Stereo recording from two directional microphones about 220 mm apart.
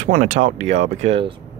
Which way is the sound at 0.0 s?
35° right (ahead or behind).